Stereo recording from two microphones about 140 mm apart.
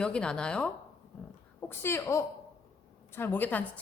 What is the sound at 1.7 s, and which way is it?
A woman's voice, 15° left (ahead or behind).